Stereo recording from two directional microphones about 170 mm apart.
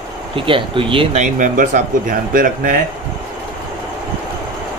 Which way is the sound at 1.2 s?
50° right (ahead or behind).